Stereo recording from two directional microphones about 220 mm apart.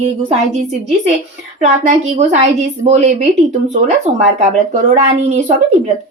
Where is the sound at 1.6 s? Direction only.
30° right (ahead or behind).